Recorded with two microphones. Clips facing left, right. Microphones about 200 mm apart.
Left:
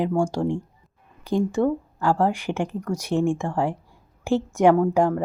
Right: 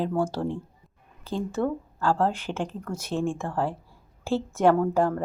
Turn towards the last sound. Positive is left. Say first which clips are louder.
# left 3 dB
turn(degrees=10)  # may be behind; listen again after turning